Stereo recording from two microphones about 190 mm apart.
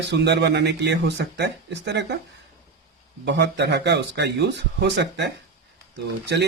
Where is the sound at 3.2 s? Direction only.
65° right (ahead or behind).